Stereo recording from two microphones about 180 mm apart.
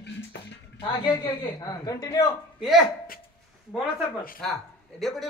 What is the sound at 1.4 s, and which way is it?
Speech, 20° left (ahead or behind).